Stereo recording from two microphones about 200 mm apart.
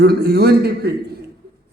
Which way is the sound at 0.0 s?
55° right (ahead or behind).